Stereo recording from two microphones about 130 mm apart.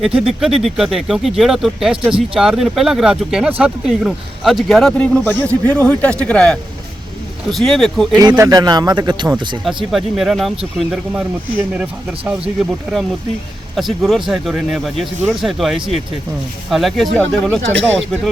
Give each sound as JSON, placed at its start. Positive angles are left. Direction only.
{"t": 0.0, "sound": "a man's voice", "side_deg": -5}
{"t": 8.2, "sound": "speech", "side_deg": -30}
{"t": 9.9, "sound": "speech", "side_deg": 0}
{"t": 11.1, "sound": "speech", "side_deg": -10}